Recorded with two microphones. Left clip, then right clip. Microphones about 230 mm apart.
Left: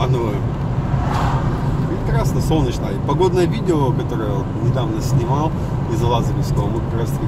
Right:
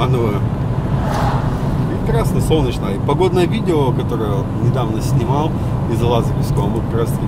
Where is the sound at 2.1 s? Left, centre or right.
Centre.